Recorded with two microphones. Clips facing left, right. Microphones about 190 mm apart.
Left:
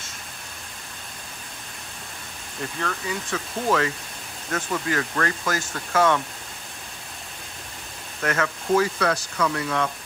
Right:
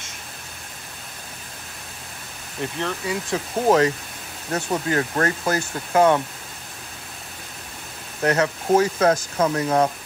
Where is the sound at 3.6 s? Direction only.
40° right (ahead or behind).